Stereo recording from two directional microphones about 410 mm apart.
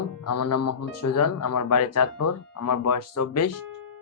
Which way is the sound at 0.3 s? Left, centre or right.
Left.